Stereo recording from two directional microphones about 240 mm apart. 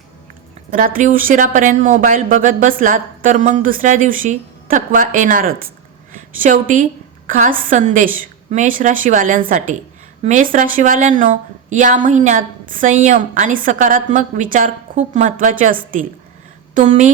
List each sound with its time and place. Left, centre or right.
0.7 s a woman's voice: right